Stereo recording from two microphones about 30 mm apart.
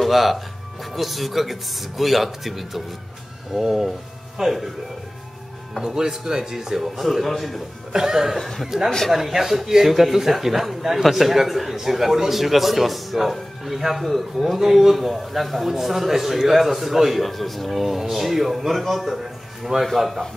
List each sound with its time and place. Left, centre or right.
0.0 s a man's voice: centre
5.8 s a man's voice: centre
7.0 s a man's voice: centre
7.9 s a man's voice: centre
8.4 s speech: centre
8.6 s a man's voice: centre
15.0 s a man's voice: centre